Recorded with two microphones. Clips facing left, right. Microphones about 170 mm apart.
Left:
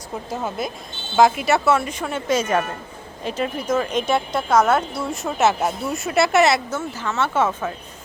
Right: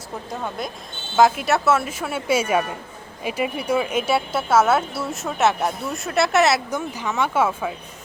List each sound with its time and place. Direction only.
0.3 s a woman's voice: 5° left (ahead or behind)
6.7 s speech: 15° right (ahead or behind)